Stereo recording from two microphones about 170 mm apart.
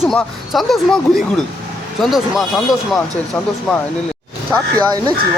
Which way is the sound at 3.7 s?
Centre (ahead or behind).